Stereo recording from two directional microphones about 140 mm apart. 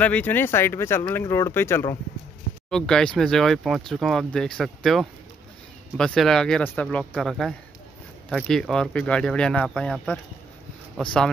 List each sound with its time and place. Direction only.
0.0 s speech: 10° left (ahead or behind)
2.7 s speech: 5° left (ahead or behind)